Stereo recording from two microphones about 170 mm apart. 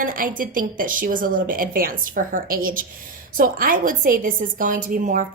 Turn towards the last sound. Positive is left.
turn(degrees=-55)  # may be behind; listen again after turning